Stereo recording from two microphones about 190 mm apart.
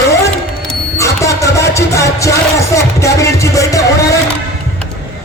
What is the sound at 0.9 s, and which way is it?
Music, 15° left (ahead or behind).